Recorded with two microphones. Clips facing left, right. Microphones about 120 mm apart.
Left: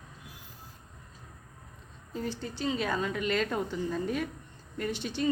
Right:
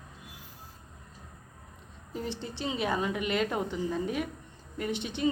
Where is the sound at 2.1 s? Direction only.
25° right (ahead or behind).